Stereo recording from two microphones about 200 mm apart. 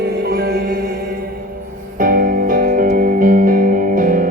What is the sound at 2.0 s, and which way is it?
Music, 45° right (ahead or behind).